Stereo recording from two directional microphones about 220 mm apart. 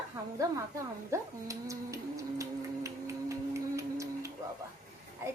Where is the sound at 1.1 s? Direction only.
15° right (ahead or behind).